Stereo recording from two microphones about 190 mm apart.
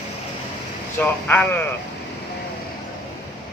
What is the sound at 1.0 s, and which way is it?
Speech, 10° left (ahead or behind).